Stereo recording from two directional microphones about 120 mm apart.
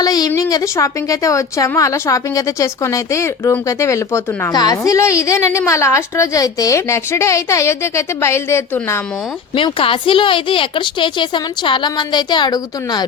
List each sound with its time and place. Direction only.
0.0 s a woman's voice: 30° left (ahead or behind)
9.6 s a woman's voice: 45° left (ahead or behind)